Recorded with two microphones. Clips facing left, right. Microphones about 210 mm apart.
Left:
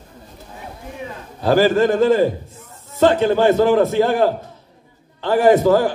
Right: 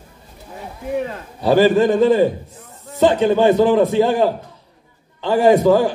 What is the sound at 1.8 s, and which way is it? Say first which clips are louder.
Speech: right 1 dB; centre (ahead or behind).